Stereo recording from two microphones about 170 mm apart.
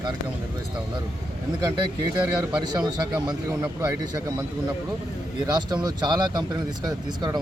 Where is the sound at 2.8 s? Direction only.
5° right (ahead or behind).